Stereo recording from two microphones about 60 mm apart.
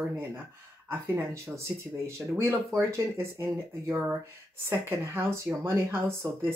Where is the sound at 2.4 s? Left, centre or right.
Right.